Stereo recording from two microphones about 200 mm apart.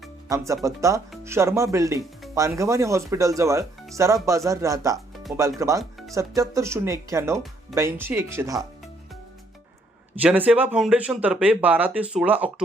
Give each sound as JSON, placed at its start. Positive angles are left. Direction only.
{"t": 0.3, "sound": "speech", "side_deg": -15}
{"t": 5.8, "sound": "music", "side_deg": 0}
{"t": 6.1, "sound": "speech", "side_deg": -15}
{"t": 10.2, "sound": "speech", "side_deg": -5}